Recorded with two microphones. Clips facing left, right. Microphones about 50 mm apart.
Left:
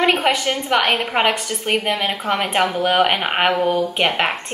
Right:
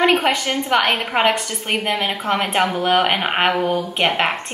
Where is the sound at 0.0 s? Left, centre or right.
Centre.